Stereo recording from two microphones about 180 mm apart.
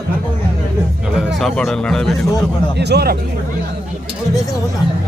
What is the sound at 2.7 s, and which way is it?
Speech, 65° right (ahead or behind).